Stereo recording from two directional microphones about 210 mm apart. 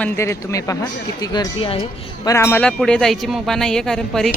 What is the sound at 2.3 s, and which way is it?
Speech, 10° left (ahead or behind).